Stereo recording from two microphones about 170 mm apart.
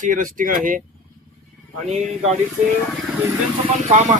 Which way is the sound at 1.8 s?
40° right (ahead or behind).